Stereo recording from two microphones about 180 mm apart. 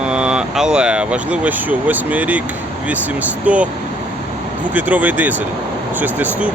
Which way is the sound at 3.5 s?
5° right (ahead or behind).